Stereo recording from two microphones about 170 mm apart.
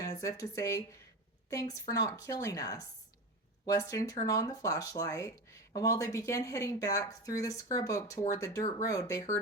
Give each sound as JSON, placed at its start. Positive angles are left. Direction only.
{"t": 0.0, "sound": "speech", "side_deg": 20}